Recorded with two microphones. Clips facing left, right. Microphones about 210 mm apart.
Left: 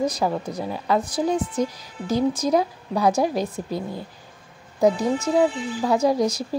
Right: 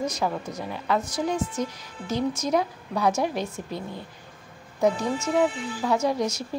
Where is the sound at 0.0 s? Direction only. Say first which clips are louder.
Left 4 dB; 35° left (ahead or behind).